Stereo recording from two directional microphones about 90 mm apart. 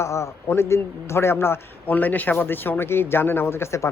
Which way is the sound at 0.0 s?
30° left (ahead or behind).